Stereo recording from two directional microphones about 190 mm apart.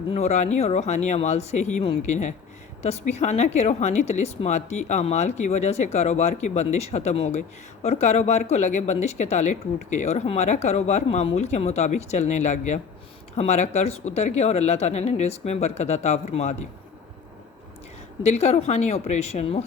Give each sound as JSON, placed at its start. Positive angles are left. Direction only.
{"t": 0.1, "sound": "a woman's voice", "side_deg": 35}
{"t": 18.2, "sound": "a woman's voice", "side_deg": 35}